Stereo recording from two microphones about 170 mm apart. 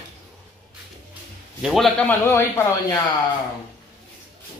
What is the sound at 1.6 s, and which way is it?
A man's voice, centre (ahead or behind).